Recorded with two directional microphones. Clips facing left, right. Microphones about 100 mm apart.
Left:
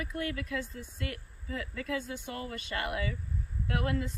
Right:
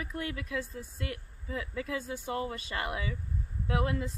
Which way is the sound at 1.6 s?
20° right (ahead or behind).